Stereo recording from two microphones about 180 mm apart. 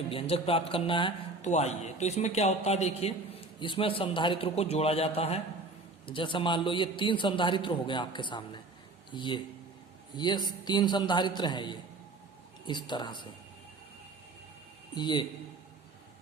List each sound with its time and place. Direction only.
0.1 s a man's voice: 30° left (ahead or behind)
1.5 s a man's voice: 40° left (ahead or behind)
14.9 s a man's voice: 25° left (ahead or behind)